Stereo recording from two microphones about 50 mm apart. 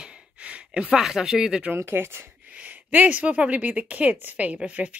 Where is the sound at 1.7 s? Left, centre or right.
Right.